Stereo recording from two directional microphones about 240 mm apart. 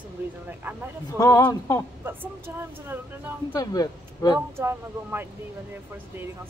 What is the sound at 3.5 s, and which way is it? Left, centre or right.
Speech, centre.